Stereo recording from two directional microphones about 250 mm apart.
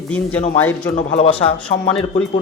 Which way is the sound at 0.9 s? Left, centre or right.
Left.